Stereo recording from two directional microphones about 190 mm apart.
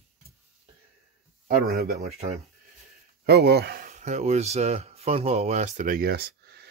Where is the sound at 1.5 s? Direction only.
55° right (ahead or behind).